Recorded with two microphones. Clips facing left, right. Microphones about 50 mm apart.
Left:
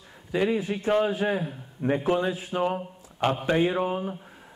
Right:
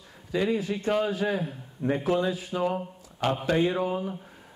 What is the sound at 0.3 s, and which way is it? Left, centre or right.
A man's voice, left.